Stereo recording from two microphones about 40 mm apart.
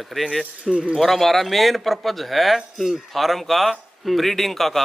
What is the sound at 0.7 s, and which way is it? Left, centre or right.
Speech, centre.